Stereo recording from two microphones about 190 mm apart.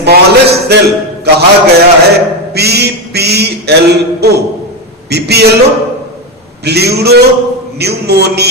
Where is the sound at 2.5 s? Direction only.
60° right (ahead or behind).